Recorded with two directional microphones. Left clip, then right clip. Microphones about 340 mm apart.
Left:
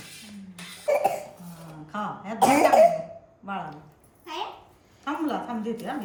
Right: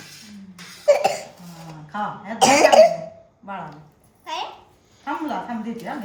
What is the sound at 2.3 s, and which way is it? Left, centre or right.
Speech, right.